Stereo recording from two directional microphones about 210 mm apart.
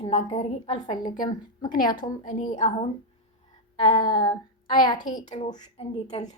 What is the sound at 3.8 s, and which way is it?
A woman's voice, 20° left (ahead or behind).